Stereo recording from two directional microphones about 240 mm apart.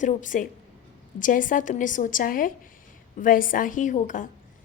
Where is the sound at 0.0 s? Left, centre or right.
Left.